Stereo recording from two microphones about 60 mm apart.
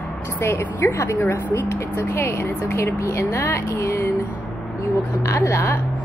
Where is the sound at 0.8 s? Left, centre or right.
Left.